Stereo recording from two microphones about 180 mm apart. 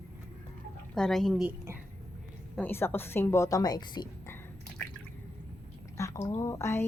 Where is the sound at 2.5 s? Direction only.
10° left (ahead or behind).